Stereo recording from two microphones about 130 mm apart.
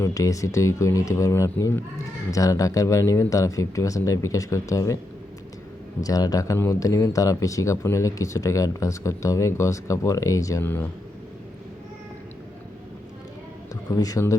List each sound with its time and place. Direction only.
0.0 s speech: 25° left (ahead or behind)
6.0 s speech: 30° left (ahead or behind)
13.9 s speech: 25° left (ahead or behind)